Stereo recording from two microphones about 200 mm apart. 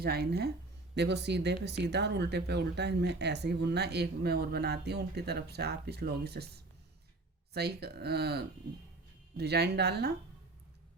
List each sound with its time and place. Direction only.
0.0 s speech: 55° right (ahead or behind)